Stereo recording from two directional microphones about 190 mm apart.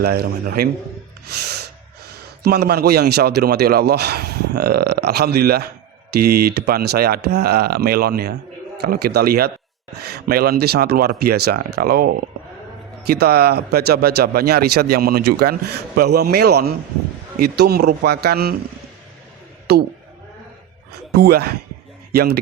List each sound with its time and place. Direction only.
0.0 s speech: 55° right (ahead or behind)
1.3 s snort: 60° right (ahead or behind)
2.4 s a man's voice: 55° right (ahead or behind)
19.7 s a man's voice: 55° right (ahead or behind)
21.1 s speech: 60° right (ahead or behind)